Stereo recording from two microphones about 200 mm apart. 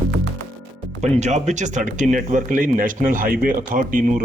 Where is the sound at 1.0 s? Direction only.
35° right (ahead or behind).